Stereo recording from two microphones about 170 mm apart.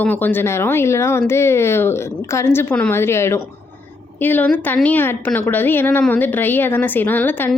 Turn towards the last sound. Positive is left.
turn(degrees=10)  # may be behind; listen again after turning